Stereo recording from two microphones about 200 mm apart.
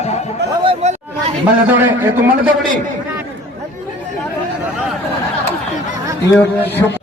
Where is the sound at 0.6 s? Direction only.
30° right (ahead or behind).